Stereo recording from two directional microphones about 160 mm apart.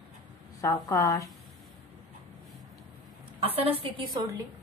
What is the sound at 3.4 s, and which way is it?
Speech, 35° right (ahead or behind).